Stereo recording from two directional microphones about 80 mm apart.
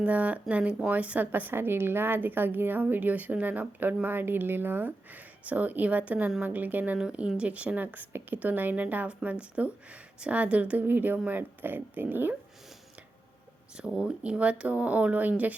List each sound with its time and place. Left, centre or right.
0.0 s a woman's voice: centre
13.7 s speech: centre